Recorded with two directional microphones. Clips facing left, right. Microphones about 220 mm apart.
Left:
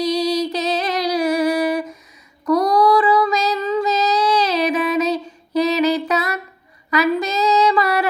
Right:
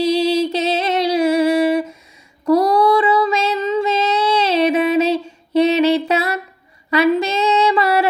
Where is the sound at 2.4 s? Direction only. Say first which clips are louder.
Right 2 dB; 25° right (ahead or behind).